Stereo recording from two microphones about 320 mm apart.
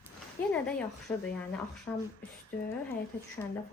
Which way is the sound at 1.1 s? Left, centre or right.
Centre.